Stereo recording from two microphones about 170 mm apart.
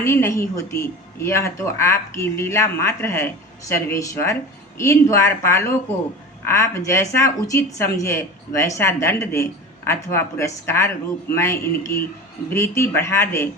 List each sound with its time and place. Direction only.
0.0 s speech: 15° left (ahead or behind)